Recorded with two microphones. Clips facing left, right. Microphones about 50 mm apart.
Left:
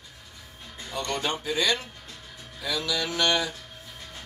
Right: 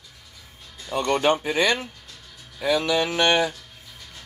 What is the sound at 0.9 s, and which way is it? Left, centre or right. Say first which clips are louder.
Speech: right 9 dB; right.